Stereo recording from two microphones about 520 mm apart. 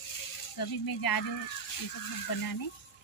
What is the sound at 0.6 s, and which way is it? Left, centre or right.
Speech, left.